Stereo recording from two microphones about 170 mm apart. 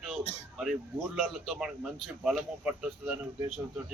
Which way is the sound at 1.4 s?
Centre (ahead or behind).